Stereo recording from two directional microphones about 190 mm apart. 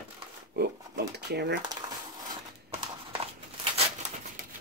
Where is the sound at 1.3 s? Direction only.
60° right (ahead or behind).